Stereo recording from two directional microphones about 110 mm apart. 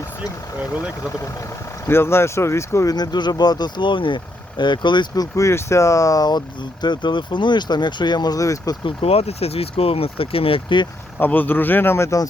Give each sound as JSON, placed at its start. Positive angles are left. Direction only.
{"t": 1.9, "sound": "speech", "side_deg": 20}
{"t": 2.9, "sound": "speech", "side_deg": 40}
{"t": 8.8, "sound": "speech", "side_deg": 65}
{"t": 11.2, "sound": "speech", "side_deg": 15}